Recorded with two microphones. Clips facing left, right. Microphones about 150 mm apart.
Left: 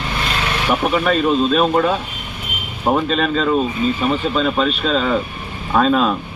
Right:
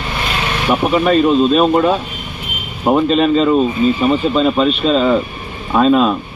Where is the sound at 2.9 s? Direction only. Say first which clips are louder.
Right 5 dB; 10° right (ahead or behind).